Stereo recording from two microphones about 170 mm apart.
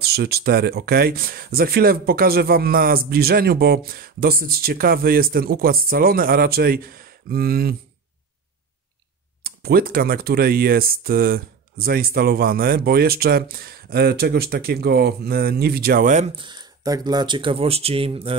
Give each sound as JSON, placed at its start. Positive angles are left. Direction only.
{"t": 0.0, "sound": "speech", "side_deg": -70}
{"t": 9.4, "sound": "speech", "side_deg": -65}
{"t": 16.3, "sound": "speech", "side_deg": -25}